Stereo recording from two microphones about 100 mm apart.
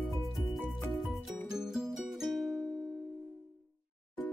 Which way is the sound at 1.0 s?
Centre (ahead or behind).